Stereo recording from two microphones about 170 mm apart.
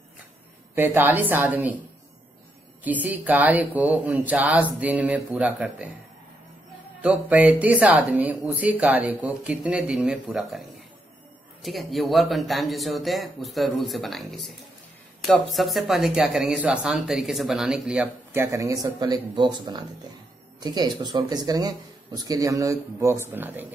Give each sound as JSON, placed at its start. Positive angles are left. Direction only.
{"t": 0.7, "sound": "speech", "side_deg": -10}
{"t": 2.8, "sound": "speech", "side_deg": -10}
{"t": 7.0, "sound": "speech", "side_deg": -10}